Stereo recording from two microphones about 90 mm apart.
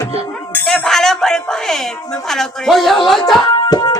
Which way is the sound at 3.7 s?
45° left (ahead or behind).